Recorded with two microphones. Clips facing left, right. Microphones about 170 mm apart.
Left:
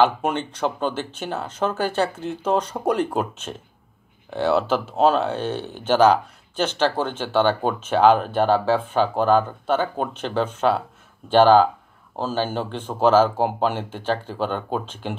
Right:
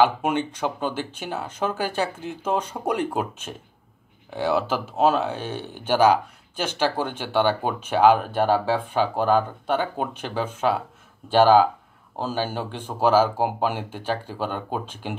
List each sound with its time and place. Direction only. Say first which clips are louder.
0.0 s speech: even; 10° right (ahead or behind)